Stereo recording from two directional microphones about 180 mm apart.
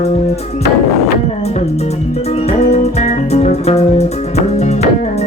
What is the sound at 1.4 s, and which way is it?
Music, 35° left (ahead or behind).